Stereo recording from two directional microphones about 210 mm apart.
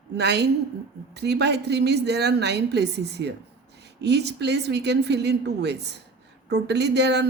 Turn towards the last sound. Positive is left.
turn(degrees=-55)  # may be behind; listen again after turning